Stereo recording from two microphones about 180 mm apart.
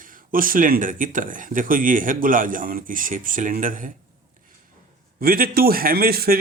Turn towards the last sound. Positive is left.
turn(degrees=-55)  # may be behind; listen again after turning